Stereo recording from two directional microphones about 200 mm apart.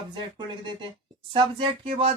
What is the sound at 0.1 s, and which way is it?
Speech, 25° right (ahead or behind).